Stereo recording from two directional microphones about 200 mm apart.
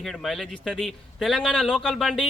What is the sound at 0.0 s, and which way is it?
A man's voice, centre (ahead or behind).